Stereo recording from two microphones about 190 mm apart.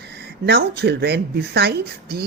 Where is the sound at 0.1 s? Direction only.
60° right (ahead or behind).